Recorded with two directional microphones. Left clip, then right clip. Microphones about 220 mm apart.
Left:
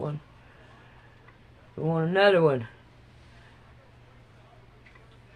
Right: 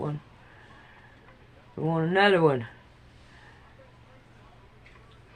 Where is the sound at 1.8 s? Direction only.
25° right (ahead or behind).